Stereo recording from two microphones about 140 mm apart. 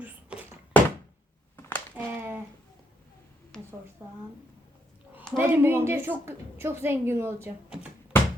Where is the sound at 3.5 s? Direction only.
5° left (ahead or behind).